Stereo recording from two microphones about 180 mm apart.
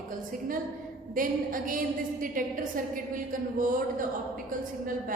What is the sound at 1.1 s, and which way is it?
A woman's voice, 50° right (ahead or behind).